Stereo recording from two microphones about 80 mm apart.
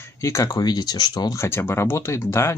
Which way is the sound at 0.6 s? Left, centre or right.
Left.